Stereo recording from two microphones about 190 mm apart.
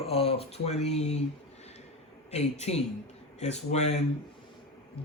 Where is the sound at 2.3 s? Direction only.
35° left (ahead or behind).